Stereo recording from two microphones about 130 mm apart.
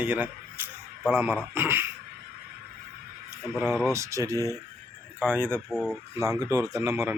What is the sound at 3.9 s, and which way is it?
Speech, 25° right (ahead or behind).